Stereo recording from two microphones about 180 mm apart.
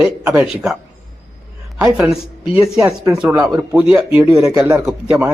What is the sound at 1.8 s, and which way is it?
A man's voice, 5° right (ahead or behind).